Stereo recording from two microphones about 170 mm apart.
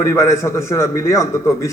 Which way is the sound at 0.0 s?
15° left (ahead or behind).